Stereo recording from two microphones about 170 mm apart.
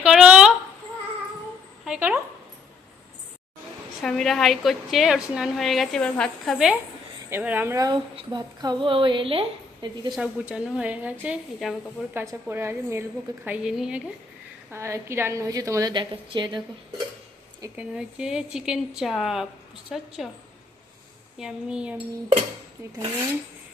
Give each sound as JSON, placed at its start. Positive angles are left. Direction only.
{"t": 0.0, "sound": "a sound", "side_deg": -5}
{"t": 1.8, "sound": "dog", "side_deg": -5}
{"t": 4.0, "sound": "a woman's voice", "side_deg": 0}
{"t": 7.3, "sound": "a woman's voice", "side_deg": -10}
{"t": 10.2, "sound": "a woman's voice", "side_deg": -5}
{"t": 12.2, "sound": "a woman's voice", "side_deg": -15}
{"t": 14.7, "sound": "a woman's voice", "side_deg": -15}
{"t": 17.7, "sound": "a woman's voice", "side_deg": -5}
{"t": 21.3, "sound": "a woman's voice", "side_deg": -5}